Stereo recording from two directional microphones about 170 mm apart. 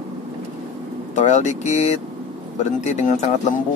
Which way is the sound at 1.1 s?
45° left (ahead or behind).